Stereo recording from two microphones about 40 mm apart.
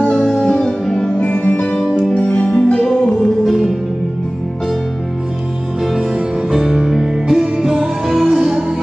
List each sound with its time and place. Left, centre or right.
0.4 s music: centre
1.1 s music: left
2.3 s music: left
6.5 s music: centre
7.5 s music: centre